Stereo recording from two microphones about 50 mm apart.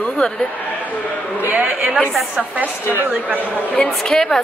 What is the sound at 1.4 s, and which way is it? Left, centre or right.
Speech, right.